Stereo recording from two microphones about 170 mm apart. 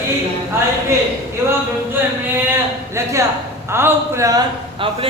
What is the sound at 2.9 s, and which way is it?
A man's voice, 15° right (ahead or behind).